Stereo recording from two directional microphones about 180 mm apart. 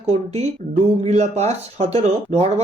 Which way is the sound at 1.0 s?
35° right (ahead or behind).